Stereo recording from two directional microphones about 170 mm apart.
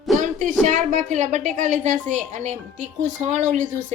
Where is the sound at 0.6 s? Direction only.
45° right (ahead or behind).